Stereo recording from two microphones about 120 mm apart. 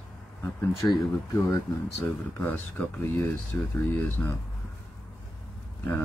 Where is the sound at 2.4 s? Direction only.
15° left (ahead or behind).